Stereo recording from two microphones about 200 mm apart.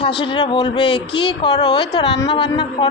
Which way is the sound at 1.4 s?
20° left (ahead or behind).